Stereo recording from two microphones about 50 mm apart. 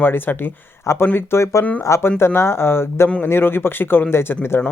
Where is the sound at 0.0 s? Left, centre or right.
Left.